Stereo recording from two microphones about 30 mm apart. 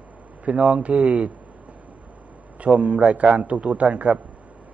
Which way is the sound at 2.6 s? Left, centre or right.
Right.